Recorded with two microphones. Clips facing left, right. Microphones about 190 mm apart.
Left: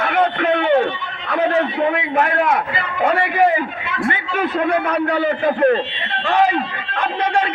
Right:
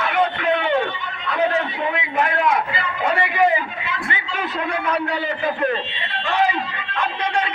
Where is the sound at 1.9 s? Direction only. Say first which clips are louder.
Left 4 dB; 50° left (ahead or behind).